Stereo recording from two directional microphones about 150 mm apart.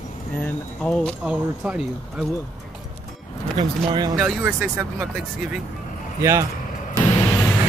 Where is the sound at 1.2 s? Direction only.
5° right (ahead or behind).